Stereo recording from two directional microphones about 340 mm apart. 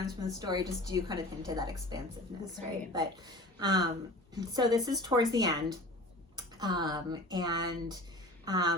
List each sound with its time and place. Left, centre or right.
0.0 s a woman's voice: centre